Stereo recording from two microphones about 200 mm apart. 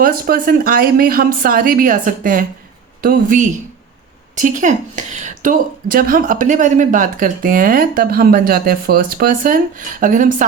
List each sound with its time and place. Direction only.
0.0 s a woman's voice: 45° right (ahead or behind)